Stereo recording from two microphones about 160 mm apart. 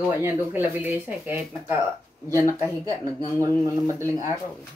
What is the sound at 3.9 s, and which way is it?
Speech, 20° right (ahead or behind).